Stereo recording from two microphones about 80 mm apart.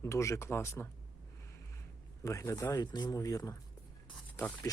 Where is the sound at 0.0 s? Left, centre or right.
Left.